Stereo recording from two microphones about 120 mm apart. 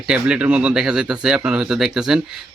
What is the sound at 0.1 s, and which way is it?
Speech, 10° right (ahead or behind).